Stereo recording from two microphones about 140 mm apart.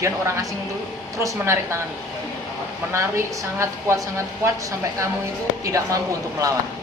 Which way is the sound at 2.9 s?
20° right (ahead or behind).